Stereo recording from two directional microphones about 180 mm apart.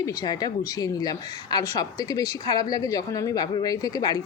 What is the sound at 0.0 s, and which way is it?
A woman's voice, 20° left (ahead or behind).